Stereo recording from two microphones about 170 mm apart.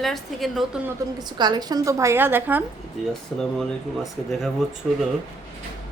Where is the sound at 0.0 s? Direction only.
Centre (ahead or behind).